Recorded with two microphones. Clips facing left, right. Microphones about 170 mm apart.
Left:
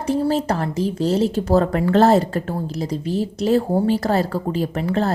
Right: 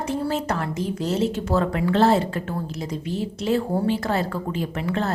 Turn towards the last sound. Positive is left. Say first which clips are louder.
# left 4 dB
turn(degrees=35)  # may be behind; listen again after turning